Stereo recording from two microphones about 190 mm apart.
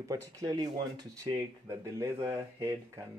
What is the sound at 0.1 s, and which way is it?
Speech, 20° right (ahead or behind).